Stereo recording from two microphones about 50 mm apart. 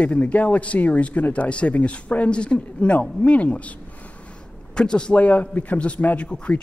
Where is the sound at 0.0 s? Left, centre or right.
Left.